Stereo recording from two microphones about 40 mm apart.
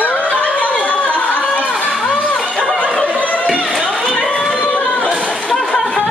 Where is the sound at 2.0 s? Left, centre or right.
Left.